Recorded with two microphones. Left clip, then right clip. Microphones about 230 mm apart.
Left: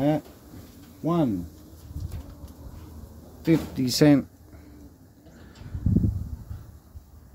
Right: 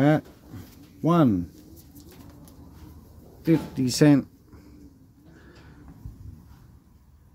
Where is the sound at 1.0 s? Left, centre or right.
Right.